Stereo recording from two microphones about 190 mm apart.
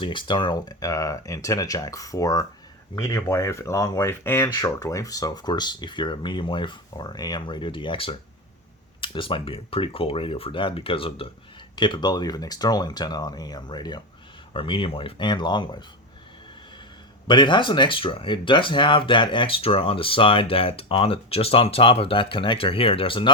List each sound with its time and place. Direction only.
0.0 s speech: 25° left (ahead or behind)
17.2 s speech: 25° left (ahead or behind)